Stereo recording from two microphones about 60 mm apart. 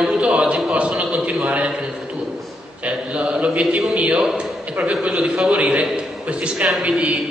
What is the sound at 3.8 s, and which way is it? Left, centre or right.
A man's voice, centre.